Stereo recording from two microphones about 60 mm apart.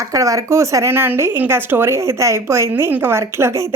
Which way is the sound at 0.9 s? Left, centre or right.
Right.